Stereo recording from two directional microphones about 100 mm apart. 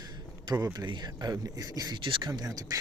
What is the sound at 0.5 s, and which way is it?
Speech, 35° right (ahead or behind).